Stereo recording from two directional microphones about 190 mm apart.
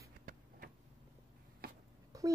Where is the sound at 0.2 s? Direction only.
50° right (ahead or behind).